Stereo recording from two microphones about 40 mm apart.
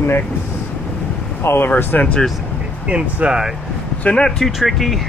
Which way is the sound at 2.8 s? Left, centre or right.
Right.